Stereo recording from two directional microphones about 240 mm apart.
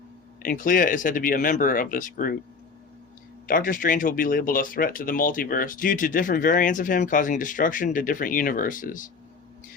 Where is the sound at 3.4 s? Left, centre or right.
Left.